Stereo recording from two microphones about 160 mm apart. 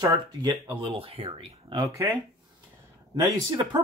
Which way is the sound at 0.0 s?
25° right (ahead or behind).